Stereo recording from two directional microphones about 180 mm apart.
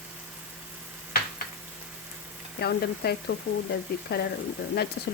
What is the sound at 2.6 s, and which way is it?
Stir, 65° left (ahead or behind).